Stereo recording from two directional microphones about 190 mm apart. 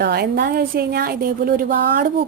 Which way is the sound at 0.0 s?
60° right (ahead or behind).